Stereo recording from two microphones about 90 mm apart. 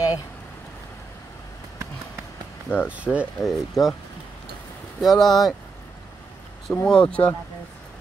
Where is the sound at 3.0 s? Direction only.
15° right (ahead or behind).